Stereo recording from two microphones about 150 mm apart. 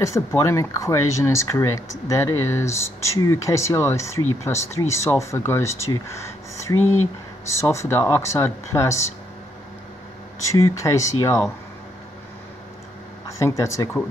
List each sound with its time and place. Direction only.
0.0 s speech: 20° left (ahead or behind)
10.5 s speech: 20° left (ahead or behind)
13.4 s speech: 20° left (ahead or behind)